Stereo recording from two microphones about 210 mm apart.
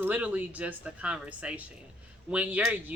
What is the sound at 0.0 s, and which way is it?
Speech, 10° right (ahead or behind).